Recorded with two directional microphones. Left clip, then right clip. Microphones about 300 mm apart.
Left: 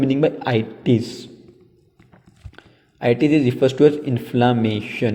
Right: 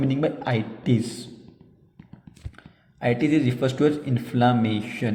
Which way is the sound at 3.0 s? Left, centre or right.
Left.